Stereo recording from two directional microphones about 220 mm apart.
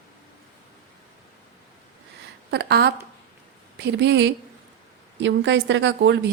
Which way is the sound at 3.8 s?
50° right (ahead or behind).